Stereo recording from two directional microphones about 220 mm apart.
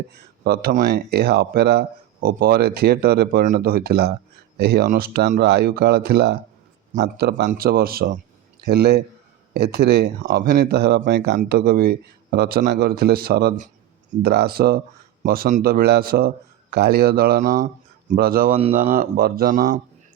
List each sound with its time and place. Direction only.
0.1 s speech: 45° right (ahead or behind)
18.5 s speech: 25° right (ahead or behind)
18.8 s speech: 40° right (ahead or behind)